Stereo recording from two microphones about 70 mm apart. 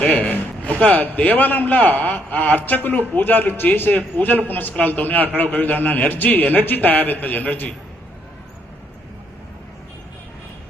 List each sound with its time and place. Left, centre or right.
0.1 s a man's voice: left